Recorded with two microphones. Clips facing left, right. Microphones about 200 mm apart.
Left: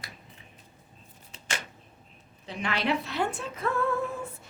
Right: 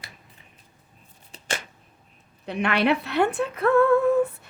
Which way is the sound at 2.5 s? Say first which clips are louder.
Right 7 dB; 60° right (ahead or behind).